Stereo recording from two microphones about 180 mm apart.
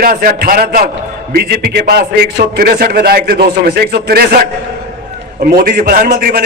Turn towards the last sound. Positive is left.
turn(degrees=-55)  # may be behind; listen again after turning